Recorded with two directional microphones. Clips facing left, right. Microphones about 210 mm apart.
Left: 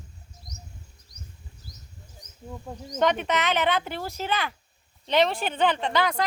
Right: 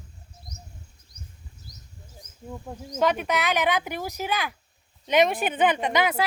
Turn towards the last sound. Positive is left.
turn(degrees=-10)  # may be behind; listen again after turning